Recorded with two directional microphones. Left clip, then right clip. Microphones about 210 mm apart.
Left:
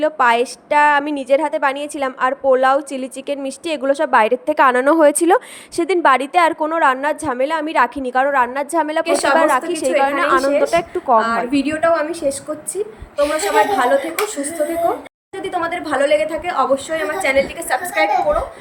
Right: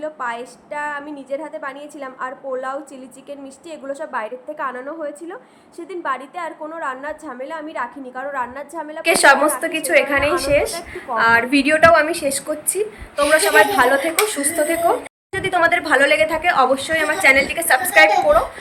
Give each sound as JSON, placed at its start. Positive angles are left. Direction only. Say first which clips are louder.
{"t": 0.0, "sound": "a woman's voice", "louder": "left 11 dB", "side_deg": 45}
{"t": 9.0, "sound": "a woman's voice", "louder": "right 4 dB", "side_deg": 5}
{"t": 10.4, "sound": "a woman's voice", "louder": "left 3 dB", "side_deg": 10}